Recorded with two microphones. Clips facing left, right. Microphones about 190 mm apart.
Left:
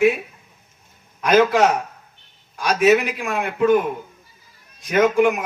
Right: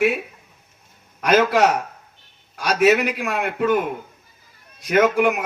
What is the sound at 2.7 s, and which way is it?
Speech, 55° right (ahead or behind).